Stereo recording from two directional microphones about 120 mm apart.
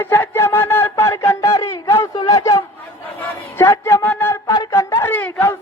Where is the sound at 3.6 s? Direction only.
20° left (ahead or behind).